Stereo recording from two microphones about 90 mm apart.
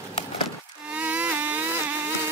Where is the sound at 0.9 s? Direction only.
15° right (ahead or behind).